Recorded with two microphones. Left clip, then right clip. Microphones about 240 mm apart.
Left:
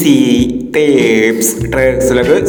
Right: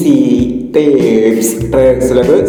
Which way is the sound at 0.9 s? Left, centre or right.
Left.